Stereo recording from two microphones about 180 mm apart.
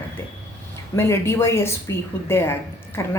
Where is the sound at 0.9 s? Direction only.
15° left (ahead or behind).